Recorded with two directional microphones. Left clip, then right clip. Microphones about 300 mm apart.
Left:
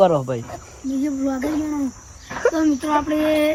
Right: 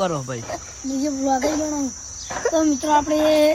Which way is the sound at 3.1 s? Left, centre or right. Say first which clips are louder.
Right 2 dB; centre.